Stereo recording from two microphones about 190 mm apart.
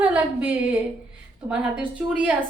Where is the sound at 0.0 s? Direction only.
5° right (ahead or behind).